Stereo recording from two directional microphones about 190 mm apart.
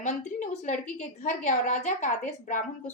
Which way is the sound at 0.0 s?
40° left (ahead or behind).